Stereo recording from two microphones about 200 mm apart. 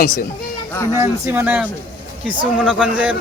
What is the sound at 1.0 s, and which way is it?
Speech, 10° right (ahead or behind).